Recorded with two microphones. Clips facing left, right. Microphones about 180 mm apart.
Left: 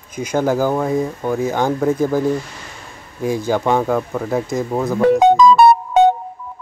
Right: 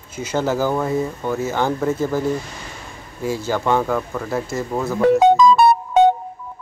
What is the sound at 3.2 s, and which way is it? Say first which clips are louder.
Speech: left 3 dB; 15° left (ahead or behind).